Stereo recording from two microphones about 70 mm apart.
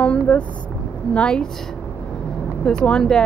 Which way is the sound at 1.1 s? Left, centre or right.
Centre.